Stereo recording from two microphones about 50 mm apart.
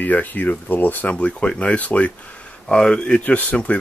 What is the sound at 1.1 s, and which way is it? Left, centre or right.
Speech, left.